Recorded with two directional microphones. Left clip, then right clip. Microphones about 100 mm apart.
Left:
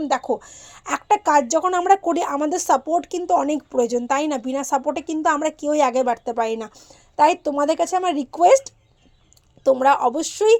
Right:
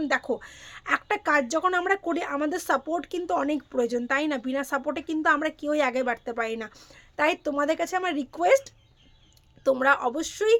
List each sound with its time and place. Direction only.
0.1 s a woman's voice: 15° left (ahead or behind)
1.9 s speech: 40° left (ahead or behind)
2.4 s a woman's voice: 25° left (ahead or behind)
7.6 s a woman's voice: 35° left (ahead or behind)
9.8 s speech: 30° left (ahead or behind)